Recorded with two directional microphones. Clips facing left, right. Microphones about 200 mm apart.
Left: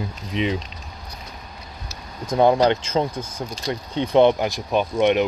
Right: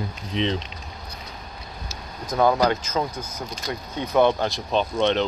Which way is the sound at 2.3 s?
25° left (ahead or behind).